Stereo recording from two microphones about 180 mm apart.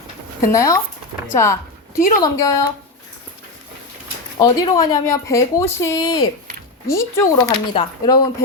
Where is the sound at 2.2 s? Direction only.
20° left (ahead or behind).